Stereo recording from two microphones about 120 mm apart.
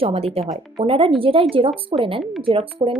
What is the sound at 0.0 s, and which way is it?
A woman's voice, 55° right (ahead or behind).